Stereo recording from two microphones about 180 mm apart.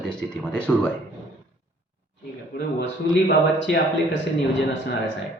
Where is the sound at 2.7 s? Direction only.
65° left (ahead or behind).